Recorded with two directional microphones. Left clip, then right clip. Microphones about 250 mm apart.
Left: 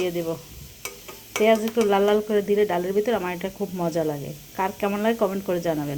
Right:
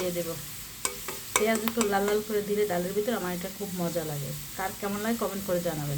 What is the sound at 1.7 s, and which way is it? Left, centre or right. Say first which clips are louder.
Speech: left 7 dB; centre.